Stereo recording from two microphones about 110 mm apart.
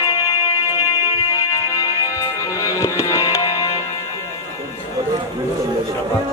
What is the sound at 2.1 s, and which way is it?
Music, 30° left (ahead or behind).